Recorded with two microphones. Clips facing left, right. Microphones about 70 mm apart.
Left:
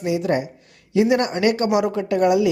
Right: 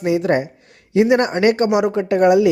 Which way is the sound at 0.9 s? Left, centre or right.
Right.